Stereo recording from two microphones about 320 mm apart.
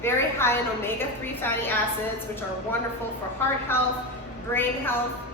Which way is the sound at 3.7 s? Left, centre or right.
Centre.